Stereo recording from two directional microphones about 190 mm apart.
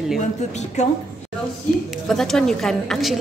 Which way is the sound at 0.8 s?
35° left (ahead or behind).